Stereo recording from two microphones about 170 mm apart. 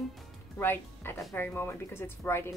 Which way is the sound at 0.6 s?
10° left (ahead or behind).